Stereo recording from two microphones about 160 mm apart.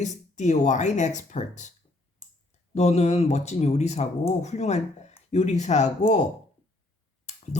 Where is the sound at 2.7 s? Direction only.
45° left (ahead or behind).